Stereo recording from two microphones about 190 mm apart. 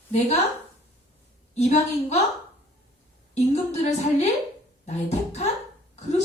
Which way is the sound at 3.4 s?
35° left (ahead or behind).